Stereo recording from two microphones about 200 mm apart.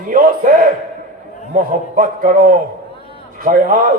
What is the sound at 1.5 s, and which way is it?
A man's voice, 45° right (ahead or behind).